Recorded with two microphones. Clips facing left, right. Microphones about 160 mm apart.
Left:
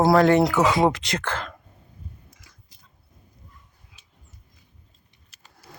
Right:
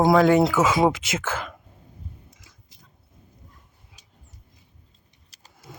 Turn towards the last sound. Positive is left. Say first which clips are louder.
# right 1 dB
turn(degrees=-35)  # may be behind; listen again after turning